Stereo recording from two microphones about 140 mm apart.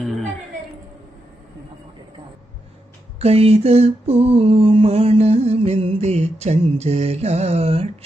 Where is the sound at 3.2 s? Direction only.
45° right (ahead or behind).